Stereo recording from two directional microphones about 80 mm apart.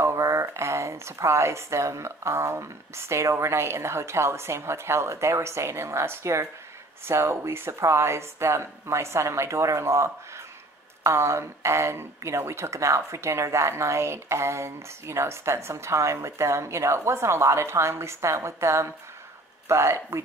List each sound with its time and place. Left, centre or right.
0.0 s speech: right